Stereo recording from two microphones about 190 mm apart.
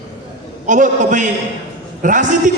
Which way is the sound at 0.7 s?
40° right (ahead or behind).